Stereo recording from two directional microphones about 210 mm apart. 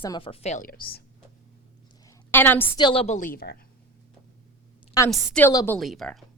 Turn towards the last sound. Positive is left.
turn(degrees=0)  # may be behind; listen again after turning